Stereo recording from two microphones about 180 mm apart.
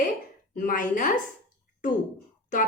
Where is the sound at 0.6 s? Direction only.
50° left (ahead or behind).